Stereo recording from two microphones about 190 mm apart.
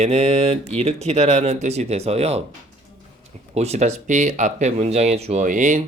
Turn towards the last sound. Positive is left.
turn(degrees=-40)  # may be behind; listen again after turning